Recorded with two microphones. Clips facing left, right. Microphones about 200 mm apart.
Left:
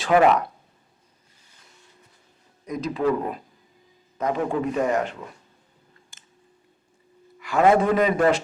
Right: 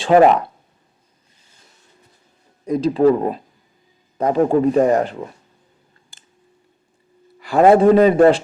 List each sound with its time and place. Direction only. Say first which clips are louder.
0.0 s speech: right 6 dB; 35° right (ahead or behind)
2.6 s speech: right 9 dB; 30° right (ahead or behind)
6.1 s a sound: right 2 dB; 30° right (ahead or behind)
7.3 s speech: right 6 dB; 35° right (ahead or behind)